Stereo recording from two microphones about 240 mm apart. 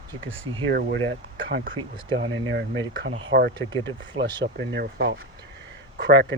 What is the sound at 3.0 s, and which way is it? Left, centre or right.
Speech, right.